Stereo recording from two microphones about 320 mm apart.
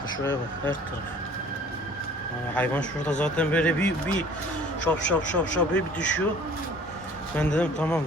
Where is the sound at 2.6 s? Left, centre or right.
Centre.